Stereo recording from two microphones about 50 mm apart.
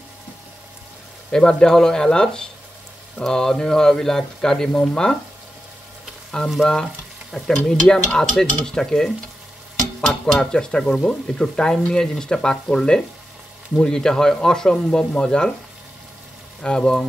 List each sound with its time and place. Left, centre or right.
1.3 s speech: centre
6.6 s stir: centre
7.9 s speech: centre
16.6 s speech: centre